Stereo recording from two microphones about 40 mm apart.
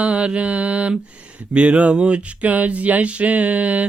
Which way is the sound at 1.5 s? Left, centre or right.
Right.